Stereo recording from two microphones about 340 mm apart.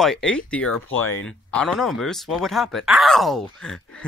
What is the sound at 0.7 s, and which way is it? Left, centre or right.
Speech, left.